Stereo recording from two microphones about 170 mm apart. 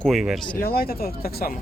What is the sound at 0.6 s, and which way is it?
Speech, 65° left (ahead or behind).